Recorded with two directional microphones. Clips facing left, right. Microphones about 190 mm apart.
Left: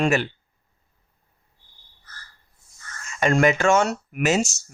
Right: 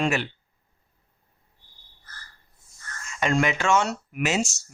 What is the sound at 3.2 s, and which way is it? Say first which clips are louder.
Speech: left 5 dB; 45° left (ahead or behind).